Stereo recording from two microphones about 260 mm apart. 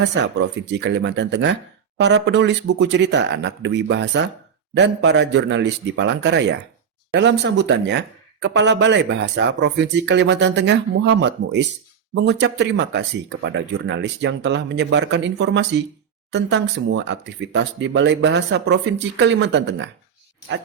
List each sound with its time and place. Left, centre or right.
0.0 s speech: right